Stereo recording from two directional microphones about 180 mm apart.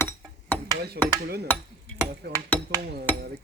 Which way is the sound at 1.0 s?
65° right (ahead or behind).